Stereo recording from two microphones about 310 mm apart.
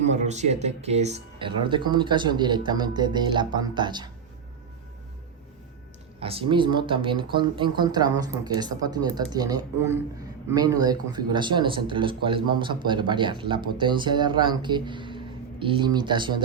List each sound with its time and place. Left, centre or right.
0.0 s speech: right
6.1 s speech: centre